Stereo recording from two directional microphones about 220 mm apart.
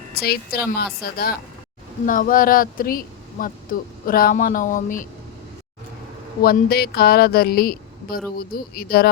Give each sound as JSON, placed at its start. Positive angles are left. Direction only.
{"t": 0.1, "sound": "speech", "side_deg": 45}
{"t": 6.4, "sound": "speech", "side_deg": 45}